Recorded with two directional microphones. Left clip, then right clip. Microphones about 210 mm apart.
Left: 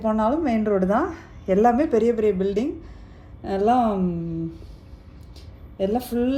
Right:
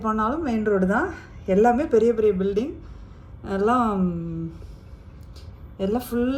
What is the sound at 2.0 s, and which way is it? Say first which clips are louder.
Speech: right 1 dB; 15° left (ahead or behind).